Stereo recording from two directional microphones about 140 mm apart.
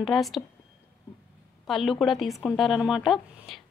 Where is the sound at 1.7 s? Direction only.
Centre (ahead or behind).